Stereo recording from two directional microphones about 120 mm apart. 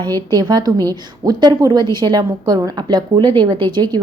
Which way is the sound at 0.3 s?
35° right (ahead or behind).